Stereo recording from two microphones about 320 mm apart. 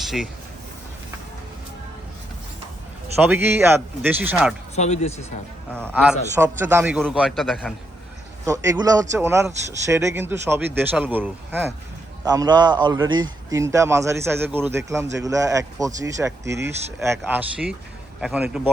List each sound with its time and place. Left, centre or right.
0.0 s speech: centre
3.2 s a man's voice: centre
4.7 s speech: centre
5.7 s a man's voice: centre